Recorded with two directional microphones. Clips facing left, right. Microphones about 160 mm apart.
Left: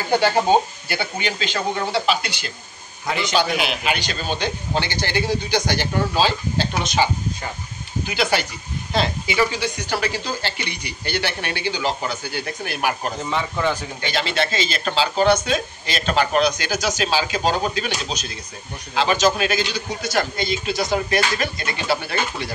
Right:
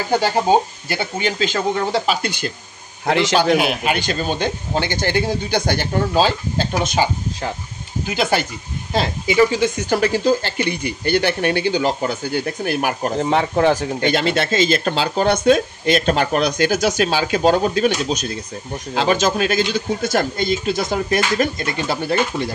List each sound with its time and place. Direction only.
0.8 s speech: 40° right (ahead or behind)
3.1 s a man's voice: 90° right
3.3 s speech: 50° right (ahead or behind)
8.1 s speech: 45° right (ahead or behind)
13.2 s speech: 65° right (ahead or behind)
14.0 s speech: 50° right (ahead or behind)